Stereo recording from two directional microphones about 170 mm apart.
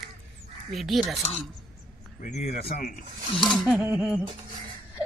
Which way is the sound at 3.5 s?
Centre (ahead or behind).